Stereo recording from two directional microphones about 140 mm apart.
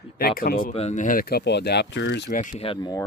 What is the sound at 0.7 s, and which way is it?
Speech, 50° left (ahead or behind).